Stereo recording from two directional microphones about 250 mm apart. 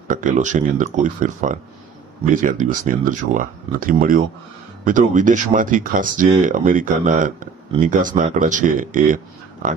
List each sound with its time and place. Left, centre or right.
0.1 s speech: right